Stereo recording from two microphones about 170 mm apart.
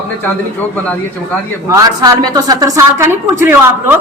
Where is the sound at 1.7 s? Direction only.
20° right (ahead or behind).